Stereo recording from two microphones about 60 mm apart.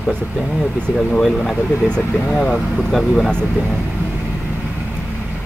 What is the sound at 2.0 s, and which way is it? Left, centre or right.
Speech, left.